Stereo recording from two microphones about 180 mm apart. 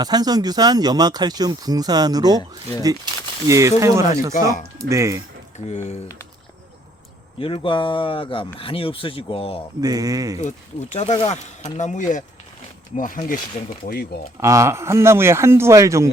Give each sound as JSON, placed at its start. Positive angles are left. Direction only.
{"t": 0.0, "sound": "speech", "side_deg": -20}
{"t": 3.4, "sound": "speech", "side_deg": -15}
{"t": 5.5, "sound": "speech", "side_deg": 40}
{"t": 7.3, "sound": "speech", "side_deg": 30}
{"t": 9.8, "sound": "speech", "side_deg": -20}
{"t": 10.3, "sound": "speech", "side_deg": 40}
{"t": 14.4, "sound": "speech", "side_deg": -15}